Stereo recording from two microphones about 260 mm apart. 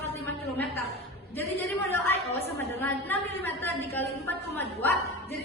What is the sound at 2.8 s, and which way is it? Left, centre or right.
A woman's voice, centre.